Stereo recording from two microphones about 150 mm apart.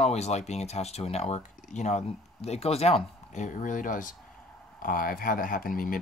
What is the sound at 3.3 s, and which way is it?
Speech, 60° left (ahead or behind).